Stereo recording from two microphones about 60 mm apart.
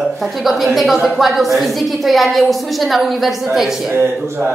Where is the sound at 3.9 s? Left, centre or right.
Right.